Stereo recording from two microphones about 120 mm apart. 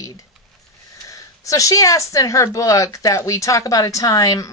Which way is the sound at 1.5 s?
30° left (ahead or behind).